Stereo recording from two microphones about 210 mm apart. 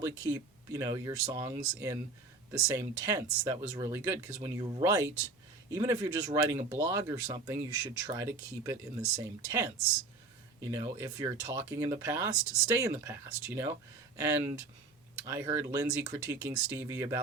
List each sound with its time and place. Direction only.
0.0 s speech: 15° right (ahead or behind)